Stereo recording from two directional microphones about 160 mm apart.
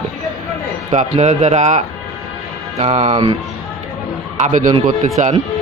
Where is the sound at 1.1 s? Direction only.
45° right (ahead or behind).